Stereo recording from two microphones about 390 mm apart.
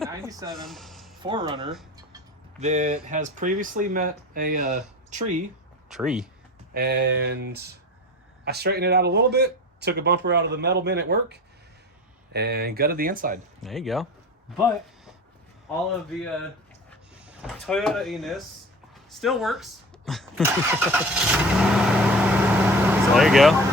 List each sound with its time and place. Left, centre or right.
0.0 s a sound: centre
1.2 s speech: centre
5.9 s speech: centre
6.7 s speech: right
13.6 s speech: centre
17.2 s speech: centre